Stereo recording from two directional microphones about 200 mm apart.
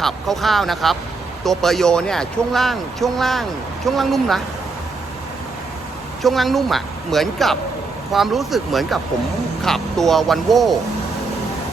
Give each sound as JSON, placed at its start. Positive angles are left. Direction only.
{"t": 0.0, "sound": "speech", "side_deg": 0}
{"t": 6.2, "sound": "speech", "side_deg": 0}